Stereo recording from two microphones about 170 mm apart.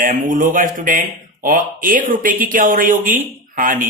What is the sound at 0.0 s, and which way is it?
Speech, 50° right (ahead or behind).